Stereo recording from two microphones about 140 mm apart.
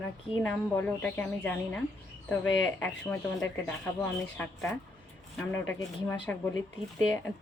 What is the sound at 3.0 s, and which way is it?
Speech, 15° left (ahead or behind).